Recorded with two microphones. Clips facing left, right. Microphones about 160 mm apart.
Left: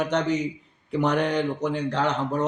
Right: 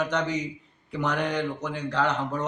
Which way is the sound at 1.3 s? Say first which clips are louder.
Left 4 dB; 30° left (ahead or behind).